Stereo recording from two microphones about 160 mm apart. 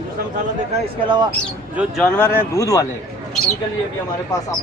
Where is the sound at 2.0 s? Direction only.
10° left (ahead or behind).